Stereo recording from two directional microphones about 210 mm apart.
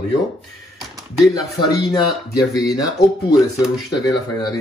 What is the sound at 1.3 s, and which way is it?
Speech, 20° left (ahead or behind).